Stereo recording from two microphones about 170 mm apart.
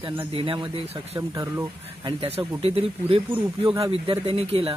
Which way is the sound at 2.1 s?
35° right (ahead or behind).